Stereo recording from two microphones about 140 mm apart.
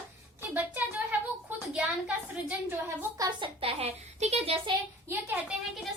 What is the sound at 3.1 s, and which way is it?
Speech, 25° right (ahead or behind).